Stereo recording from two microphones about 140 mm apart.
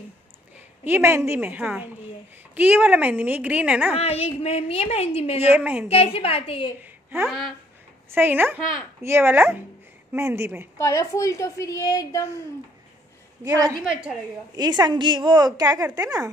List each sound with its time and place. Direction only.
0.8 s a woman's voice: 15° right (ahead or behind)
3.9 s a woman's voice: 45° left (ahead or behind)
5.5 s a woman's voice: 10° right (ahead or behind)
5.9 s a woman's voice: 45° left (ahead or behind)
6.8 s a sound: 15° right (ahead or behind)
7.2 s speech: centre (ahead or behind)
8.1 s a woman's voice: 15° right (ahead or behind)
10.8 s a woman's voice: 20° left (ahead or behind)
13.4 s a woman's voice: 25° right (ahead or behind)
13.7 s a woman's voice: 5° right (ahead or behind)
14.5 s a woman's voice: 30° right (ahead or behind)